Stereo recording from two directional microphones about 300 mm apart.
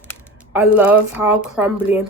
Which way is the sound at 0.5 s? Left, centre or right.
Centre.